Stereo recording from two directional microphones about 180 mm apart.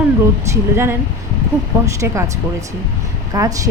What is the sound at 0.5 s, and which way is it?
Speech, 15° right (ahead or behind).